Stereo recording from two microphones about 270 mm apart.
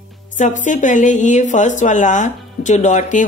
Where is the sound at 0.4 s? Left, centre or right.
Left.